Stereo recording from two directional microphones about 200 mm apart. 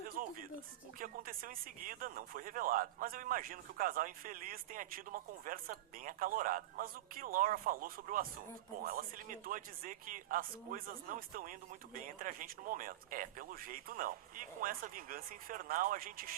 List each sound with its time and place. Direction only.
0.2 s music: 40° right (ahead or behind)
0.9 s speech: 45° right (ahead or behind)